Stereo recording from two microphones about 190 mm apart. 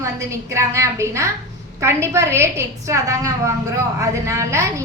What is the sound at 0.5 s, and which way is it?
A woman's voice, 15° right (ahead or behind).